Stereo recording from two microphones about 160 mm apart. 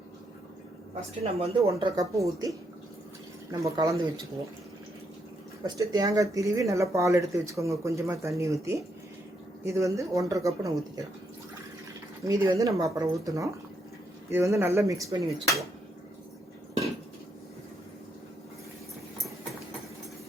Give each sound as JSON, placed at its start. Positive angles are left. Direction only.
{"t": 1.2, "sound": "speech", "side_deg": -40}
{"t": 2.0, "sound": "speech", "side_deg": -20}
{"t": 3.6, "sound": "speech", "side_deg": -25}
{"t": 5.6, "sound": "speech", "side_deg": -25}
{"t": 12.2, "sound": "speech", "side_deg": -20}